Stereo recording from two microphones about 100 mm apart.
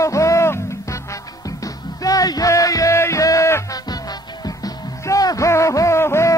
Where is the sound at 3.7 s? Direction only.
40° left (ahead or behind).